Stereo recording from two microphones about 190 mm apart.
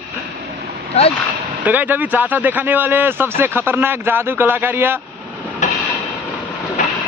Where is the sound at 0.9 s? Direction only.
35° left (ahead or behind).